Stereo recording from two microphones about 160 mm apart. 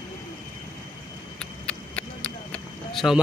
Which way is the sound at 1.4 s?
5° left (ahead or behind).